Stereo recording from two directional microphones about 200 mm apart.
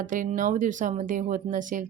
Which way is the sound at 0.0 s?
40° right (ahead or behind).